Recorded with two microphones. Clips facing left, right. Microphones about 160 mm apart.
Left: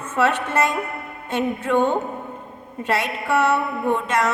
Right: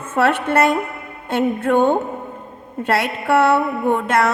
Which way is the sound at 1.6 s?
55° right (ahead or behind).